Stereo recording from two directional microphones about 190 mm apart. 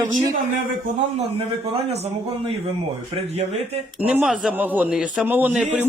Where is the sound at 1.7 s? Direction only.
35° right (ahead or behind).